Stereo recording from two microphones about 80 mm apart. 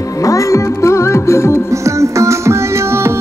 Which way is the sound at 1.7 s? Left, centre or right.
Right.